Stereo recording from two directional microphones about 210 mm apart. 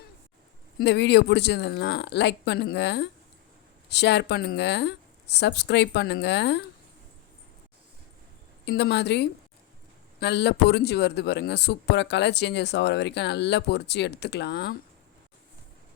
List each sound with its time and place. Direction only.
0.8 s speech: 55° left (ahead or behind)
8.6 s a man's voice: 55° left (ahead or behind)